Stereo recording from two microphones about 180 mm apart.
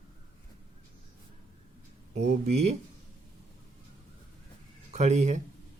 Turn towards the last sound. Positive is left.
turn(degrees=-40)  # may be behind; listen again after turning